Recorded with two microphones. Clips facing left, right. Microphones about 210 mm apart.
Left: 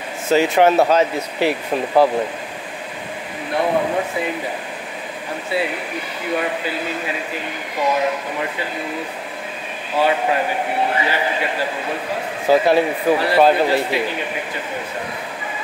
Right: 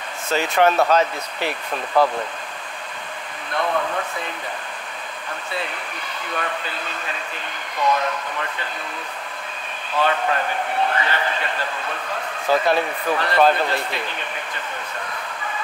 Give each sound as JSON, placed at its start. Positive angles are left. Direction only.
{"t": 0.3, "sound": "a man's voice", "side_deg": 10}
{"t": 3.7, "sound": "speech", "side_deg": 20}
{"t": 5.5, "sound": "a man's voice", "side_deg": 10}
{"t": 9.9, "sound": "a man's voice", "side_deg": 10}